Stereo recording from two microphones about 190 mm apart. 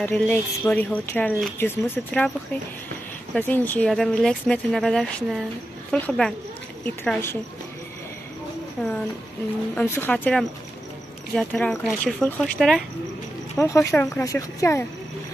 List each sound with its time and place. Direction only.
0.0 s speech: 5° left (ahead or behind)
3.3 s speech: 10° left (ahead or behind)
8.8 s speech: 5° left (ahead or behind)
13.6 s speech: 15° left (ahead or behind)